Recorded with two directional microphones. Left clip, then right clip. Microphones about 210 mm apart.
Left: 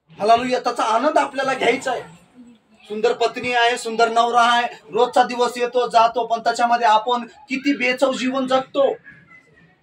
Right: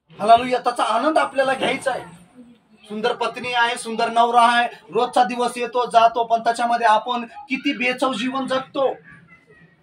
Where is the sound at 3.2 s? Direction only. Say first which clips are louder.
Left 2 dB; 15° left (ahead or behind).